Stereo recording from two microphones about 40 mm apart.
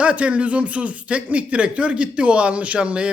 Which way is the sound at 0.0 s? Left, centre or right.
Right.